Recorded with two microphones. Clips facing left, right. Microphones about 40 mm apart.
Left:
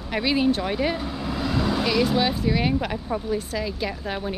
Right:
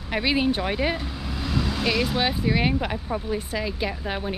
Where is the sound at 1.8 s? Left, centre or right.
Centre.